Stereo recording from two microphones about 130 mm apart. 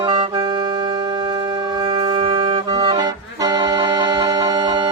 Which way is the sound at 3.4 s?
35° right (ahead or behind).